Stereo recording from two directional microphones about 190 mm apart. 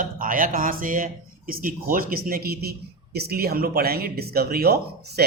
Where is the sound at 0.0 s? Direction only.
45° right (ahead or behind).